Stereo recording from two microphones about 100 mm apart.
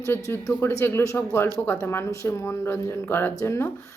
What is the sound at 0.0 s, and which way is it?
Speech, 25° left (ahead or behind).